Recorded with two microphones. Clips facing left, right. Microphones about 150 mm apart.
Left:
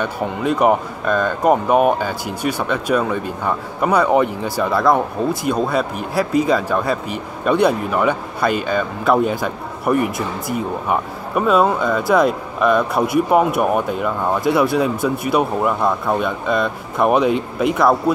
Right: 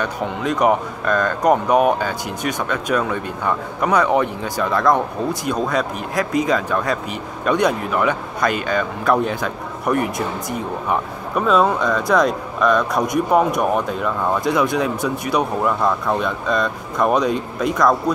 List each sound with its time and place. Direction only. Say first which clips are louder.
0.0 s a man's voice: left 2 dB; 5° left (ahead or behind)
6.1 s speech: left 3 dB; 35° left (ahead or behind)
6.5 s a man's voice: left 2 dB; 10° left (ahead or behind)